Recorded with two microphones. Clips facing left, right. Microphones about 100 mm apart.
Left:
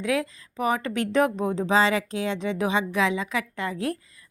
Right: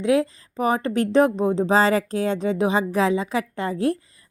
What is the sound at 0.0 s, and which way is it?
A woman's voice, 30° right (ahead or behind).